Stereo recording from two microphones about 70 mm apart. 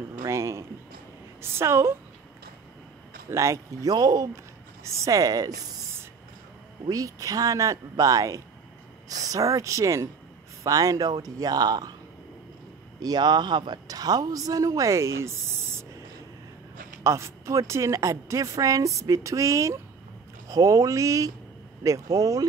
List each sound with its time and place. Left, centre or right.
0.3 s a sound: right
1.4 s a woman's voice: right
3.3 s a woman's voice: right
3.9 s speech: right
4.8 s a woman's voice: right
6.9 s a man's voice: right
13.0 s a man's voice: right
17.0 s a woman's voice: right